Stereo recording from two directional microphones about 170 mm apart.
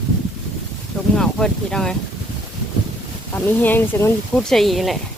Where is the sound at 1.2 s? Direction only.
5° left (ahead or behind).